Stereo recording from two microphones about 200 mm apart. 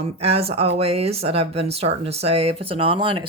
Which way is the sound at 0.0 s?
30° right (ahead or behind).